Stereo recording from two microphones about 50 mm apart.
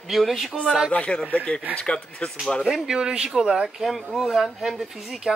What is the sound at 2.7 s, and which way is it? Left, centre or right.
Speech, centre.